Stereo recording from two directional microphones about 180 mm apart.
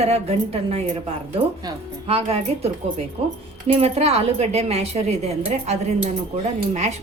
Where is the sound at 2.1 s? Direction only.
35° right (ahead or behind).